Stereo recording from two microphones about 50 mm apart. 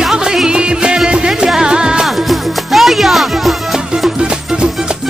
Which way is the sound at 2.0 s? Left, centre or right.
Centre.